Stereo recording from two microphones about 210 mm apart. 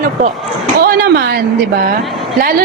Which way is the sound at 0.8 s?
45° right (ahead or behind).